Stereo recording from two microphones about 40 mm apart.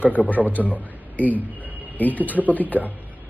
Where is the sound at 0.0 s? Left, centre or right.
Left.